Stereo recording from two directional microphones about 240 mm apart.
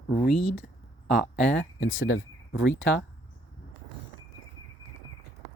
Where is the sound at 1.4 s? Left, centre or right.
Left.